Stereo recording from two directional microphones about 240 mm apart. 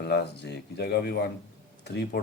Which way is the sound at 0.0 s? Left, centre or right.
Left.